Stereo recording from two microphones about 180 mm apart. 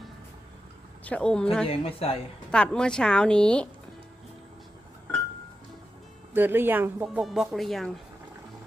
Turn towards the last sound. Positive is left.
turn(degrees=0)  # may be behind; listen again after turning